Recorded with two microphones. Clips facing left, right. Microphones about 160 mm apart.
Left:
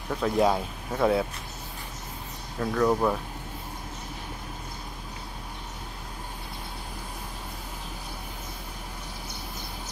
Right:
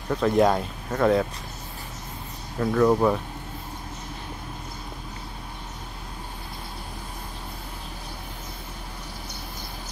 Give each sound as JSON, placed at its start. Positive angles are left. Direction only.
{"t": 0.1, "sound": "speech", "side_deg": 0}
{"t": 2.6, "sound": "speech", "side_deg": 0}